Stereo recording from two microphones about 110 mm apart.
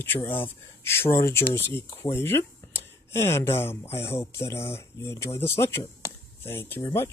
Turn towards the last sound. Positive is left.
turn(degrees=20)  # may be behind; listen again after turning